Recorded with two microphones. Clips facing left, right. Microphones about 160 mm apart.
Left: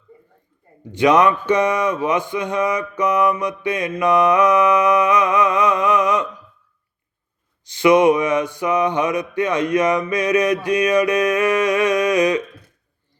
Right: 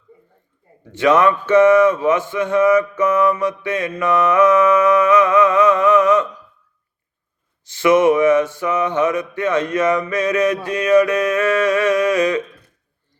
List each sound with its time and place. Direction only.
0.9 s speech: 15° left (ahead or behind)
7.6 s speech: 15° left (ahead or behind)